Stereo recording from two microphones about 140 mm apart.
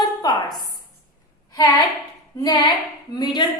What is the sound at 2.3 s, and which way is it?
A woman's voice, 30° left (ahead or behind).